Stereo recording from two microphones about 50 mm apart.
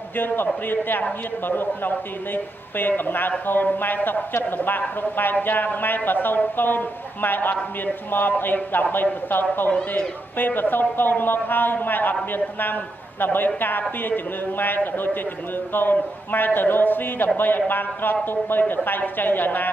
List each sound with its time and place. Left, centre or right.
0.7 s a man's voice: left